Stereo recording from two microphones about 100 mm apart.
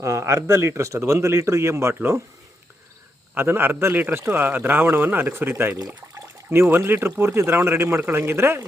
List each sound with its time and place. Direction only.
0.0 s speech: 30° right (ahead or behind)
3.3 s a man's voice: 20° right (ahead or behind)